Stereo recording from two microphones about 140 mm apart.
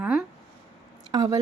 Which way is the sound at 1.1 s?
25° right (ahead or behind).